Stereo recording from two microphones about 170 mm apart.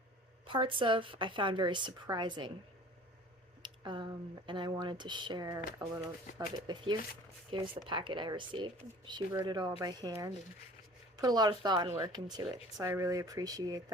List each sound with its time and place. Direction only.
0.4 s speech: 30° right (ahead or behind)
3.6 s speech: 30° right (ahead or behind)
7.9 s speech: 30° right (ahead or behind)